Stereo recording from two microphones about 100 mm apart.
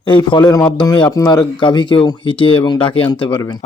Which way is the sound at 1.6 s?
50° left (ahead or behind).